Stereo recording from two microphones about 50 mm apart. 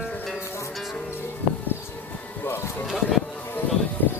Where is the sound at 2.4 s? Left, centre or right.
Left.